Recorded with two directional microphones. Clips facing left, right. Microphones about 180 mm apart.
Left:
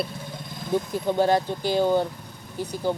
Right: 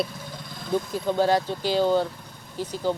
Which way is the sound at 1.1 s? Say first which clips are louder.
Left 1 dB; 15° left (ahead or behind).